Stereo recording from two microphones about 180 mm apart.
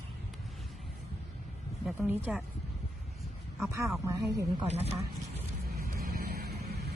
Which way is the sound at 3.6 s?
15° right (ahead or behind).